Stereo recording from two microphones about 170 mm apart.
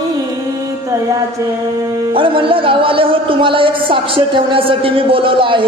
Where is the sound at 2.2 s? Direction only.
30° right (ahead or behind).